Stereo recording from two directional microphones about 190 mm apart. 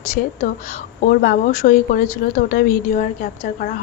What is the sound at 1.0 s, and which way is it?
A woman's voice, 50° left (ahead or behind).